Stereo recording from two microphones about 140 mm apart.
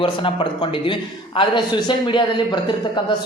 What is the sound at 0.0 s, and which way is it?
A man's voice, 35° left (ahead or behind).